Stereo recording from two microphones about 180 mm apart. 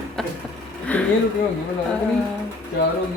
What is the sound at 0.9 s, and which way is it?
Speech, 10° left (ahead or behind).